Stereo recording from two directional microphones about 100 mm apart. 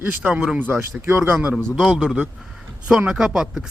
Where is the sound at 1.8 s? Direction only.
5° right (ahead or behind).